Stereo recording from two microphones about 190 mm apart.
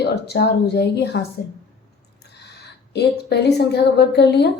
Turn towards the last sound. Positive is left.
turn(degrees=60)  # may be behind; listen again after turning